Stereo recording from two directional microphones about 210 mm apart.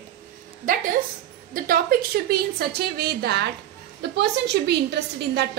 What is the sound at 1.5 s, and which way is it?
A woman's voice, 45° right (ahead or behind).